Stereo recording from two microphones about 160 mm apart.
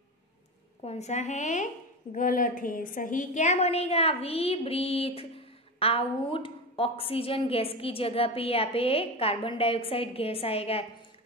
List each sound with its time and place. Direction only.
0.8 s a woman's voice: 45° left (ahead or behind)